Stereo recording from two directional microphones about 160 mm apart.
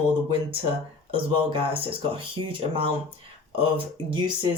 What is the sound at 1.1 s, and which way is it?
Speech, 35° right (ahead or behind).